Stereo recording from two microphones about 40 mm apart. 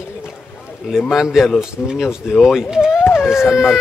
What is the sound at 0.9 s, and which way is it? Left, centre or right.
A man's voice, centre.